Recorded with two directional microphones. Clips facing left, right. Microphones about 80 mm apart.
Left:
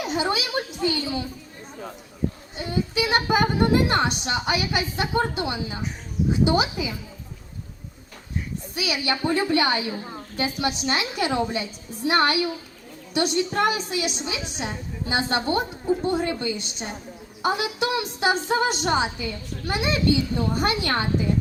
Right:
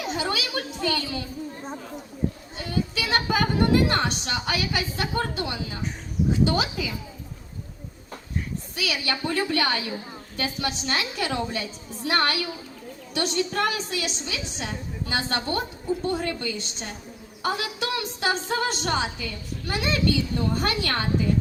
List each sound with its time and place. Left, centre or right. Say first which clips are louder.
0.0 s a woman's voice: left 3 dB; left
2.6 s a woman's voice: left 3 dB; left
8.7 s a woman's voice: left 3 dB; centre